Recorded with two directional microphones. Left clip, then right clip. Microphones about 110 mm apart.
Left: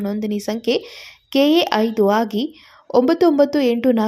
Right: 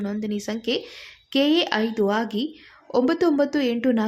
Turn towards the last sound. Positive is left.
turn(degrees=25)  # may be behind; listen again after turning